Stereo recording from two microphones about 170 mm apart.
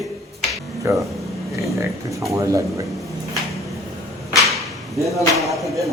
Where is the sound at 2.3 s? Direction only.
20° right (ahead or behind).